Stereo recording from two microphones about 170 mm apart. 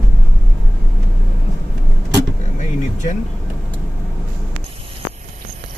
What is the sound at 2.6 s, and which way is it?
Vehicle, 45° left (ahead or behind).